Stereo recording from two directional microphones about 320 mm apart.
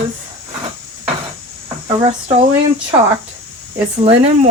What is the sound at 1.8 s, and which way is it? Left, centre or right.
Speech, right.